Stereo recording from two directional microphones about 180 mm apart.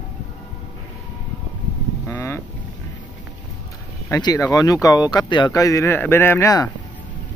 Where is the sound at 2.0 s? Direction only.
15° left (ahead or behind).